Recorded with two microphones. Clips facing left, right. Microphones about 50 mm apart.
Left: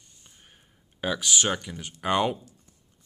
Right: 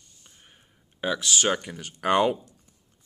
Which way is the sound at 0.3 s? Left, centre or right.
Centre.